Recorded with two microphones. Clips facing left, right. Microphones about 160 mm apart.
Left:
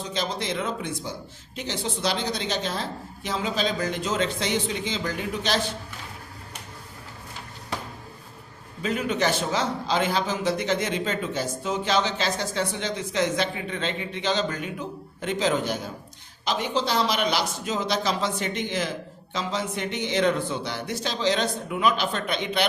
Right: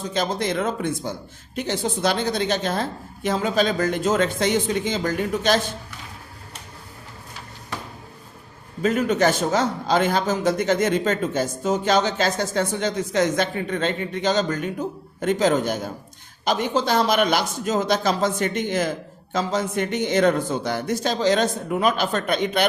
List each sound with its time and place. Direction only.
0.1 s a man's voice: 50° right (ahead or behind)
8.8 s a man's voice: 45° right (ahead or behind)